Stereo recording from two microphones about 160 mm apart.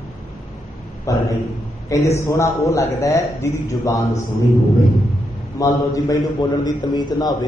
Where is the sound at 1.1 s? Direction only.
20° left (ahead or behind).